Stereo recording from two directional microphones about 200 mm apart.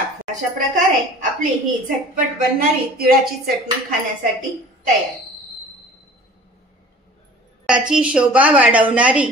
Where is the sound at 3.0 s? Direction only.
50° right (ahead or behind).